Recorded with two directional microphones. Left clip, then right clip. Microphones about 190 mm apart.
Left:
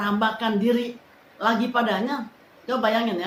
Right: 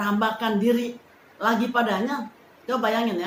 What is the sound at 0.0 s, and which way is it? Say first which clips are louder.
A woman's voice: left 1 dB; 5° left (ahead or behind).